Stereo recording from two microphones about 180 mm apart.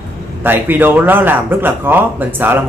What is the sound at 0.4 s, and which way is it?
A man's voice, 10° right (ahead or behind).